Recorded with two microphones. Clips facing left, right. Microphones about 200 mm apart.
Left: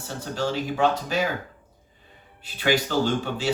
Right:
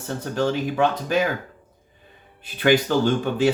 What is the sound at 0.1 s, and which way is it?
Speech, 55° right (ahead or behind).